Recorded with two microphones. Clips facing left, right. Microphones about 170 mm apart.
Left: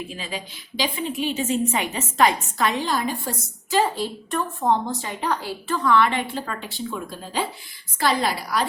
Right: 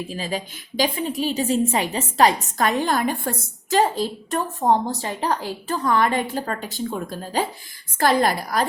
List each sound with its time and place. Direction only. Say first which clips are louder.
0.1 s a woman's voice: right 5 dB; 40° right (ahead or behind)